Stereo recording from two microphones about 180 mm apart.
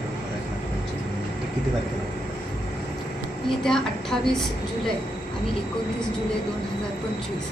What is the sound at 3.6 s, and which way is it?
Speech, 5° left (ahead or behind).